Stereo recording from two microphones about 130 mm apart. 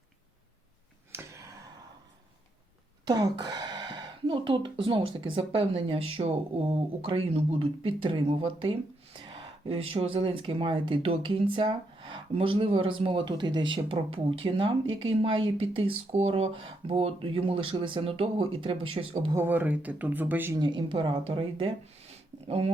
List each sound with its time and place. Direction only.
1.1 s a sound: 20° right (ahead or behind)
3.1 s a woman's voice: 35° right (ahead or behind)
19.3 s speech: 15° right (ahead or behind)
20.6 s a woman's voice: 40° right (ahead or behind)